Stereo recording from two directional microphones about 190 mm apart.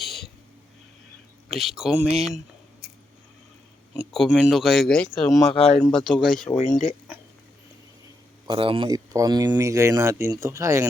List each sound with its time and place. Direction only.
0.0 s a sound: centre (ahead or behind)
1.5 s speech: centre (ahead or behind)
4.1 s speech: centre (ahead or behind)
5.5 s speech: 35° left (ahead or behind)
5.8 s speech: centre (ahead or behind)
6.7 s a sound: centre (ahead or behind)
8.4 s speech: 30° right (ahead or behind)